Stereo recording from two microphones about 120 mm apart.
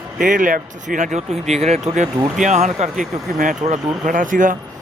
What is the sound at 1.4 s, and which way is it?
A man's voice, 65° right (ahead or behind).